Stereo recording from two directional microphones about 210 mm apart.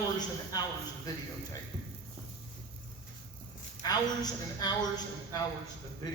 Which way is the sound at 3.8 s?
20° left (ahead or behind).